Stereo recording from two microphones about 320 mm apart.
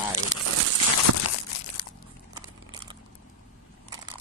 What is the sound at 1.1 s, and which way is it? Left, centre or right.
Crumpling, right.